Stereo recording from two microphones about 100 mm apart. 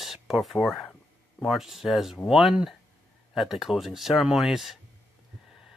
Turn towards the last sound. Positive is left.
turn(degrees=0)  # may be behind; listen again after turning